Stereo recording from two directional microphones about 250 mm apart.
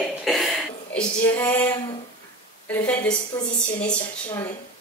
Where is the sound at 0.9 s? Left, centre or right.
Centre.